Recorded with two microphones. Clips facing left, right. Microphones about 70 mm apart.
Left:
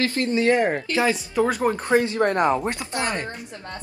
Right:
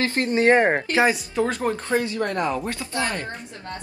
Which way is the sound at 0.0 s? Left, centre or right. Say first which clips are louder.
Right 1 dB; right.